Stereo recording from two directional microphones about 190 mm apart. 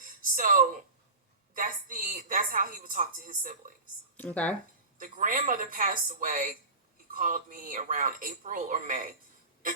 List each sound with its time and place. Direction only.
0.0 s a sound: 45° right (ahead or behind)
1.5 s a woman's voice: 45° right (ahead or behind)
4.2 s speech: 10° left (ahead or behind)
4.9 s a woman's voice: 45° right (ahead or behind)